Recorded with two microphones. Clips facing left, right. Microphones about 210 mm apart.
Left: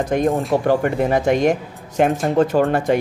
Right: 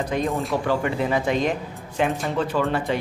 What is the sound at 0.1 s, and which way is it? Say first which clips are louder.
Speech: left 7 dB; 50° left (ahead or behind).